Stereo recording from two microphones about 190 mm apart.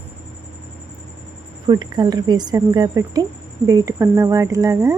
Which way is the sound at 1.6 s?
25° right (ahead or behind).